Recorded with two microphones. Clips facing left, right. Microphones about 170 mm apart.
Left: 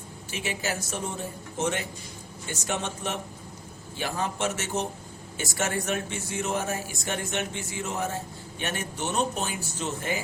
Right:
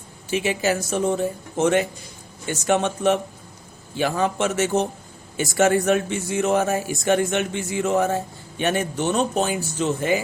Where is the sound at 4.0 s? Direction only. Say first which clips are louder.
Right 8 dB; 90° right.